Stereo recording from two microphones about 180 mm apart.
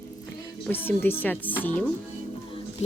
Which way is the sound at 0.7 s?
10° left (ahead or behind).